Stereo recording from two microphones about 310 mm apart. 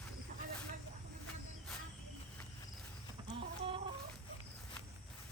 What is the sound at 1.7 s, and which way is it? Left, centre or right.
Cricket, centre.